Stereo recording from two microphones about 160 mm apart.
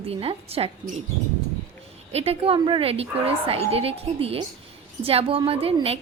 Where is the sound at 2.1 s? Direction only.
40° right (ahead or behind).